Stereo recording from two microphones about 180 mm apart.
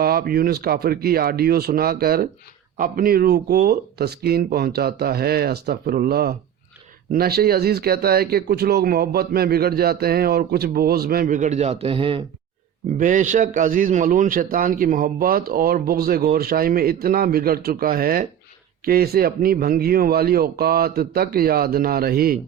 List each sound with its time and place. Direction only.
0.0 s speech: 60° right (ahead or behind); by 12.2 s 30° right (ahead or behind)
13.0 s a man's voice: 45° right (ahead or behind)